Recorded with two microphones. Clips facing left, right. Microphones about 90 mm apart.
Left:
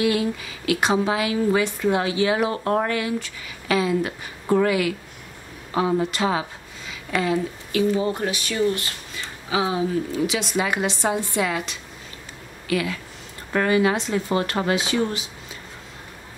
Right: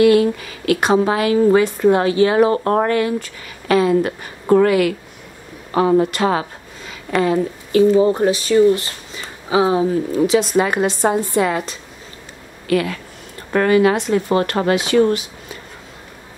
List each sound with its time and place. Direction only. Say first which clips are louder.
0.0 s a woman's voice: right 9 dB; 55° right (ahead or behind)
6.9 s a woman's voice: right 5 dB; 45° right (ahead or behind)
12.6 s a woman's voice: right 6 dB; 50° right (ahead or behind)